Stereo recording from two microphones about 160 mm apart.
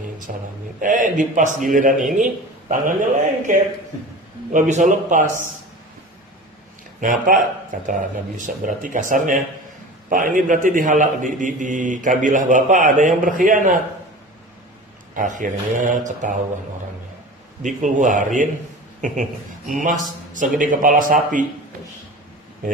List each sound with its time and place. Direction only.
0.3 s a man's voice: 55° right (ahead or behind)
7.0 s a man's voice: 55° right (ahead or behind)
15.1 s a man's voice: 55° right (ahead or behind)
17.6 s a man's voice: 55° right (ahead or behind)